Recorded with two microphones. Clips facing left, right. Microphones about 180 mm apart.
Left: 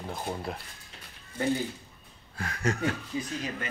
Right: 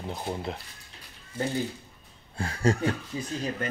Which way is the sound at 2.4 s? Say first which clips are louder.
Right 4 dB; 30° right (ahead or behind).